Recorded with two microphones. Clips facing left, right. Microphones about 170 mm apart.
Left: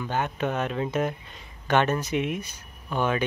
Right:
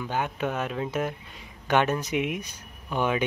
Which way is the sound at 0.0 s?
10° right (ahead or behind).